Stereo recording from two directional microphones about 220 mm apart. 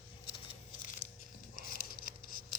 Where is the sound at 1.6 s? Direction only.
40° left (ahead or behind).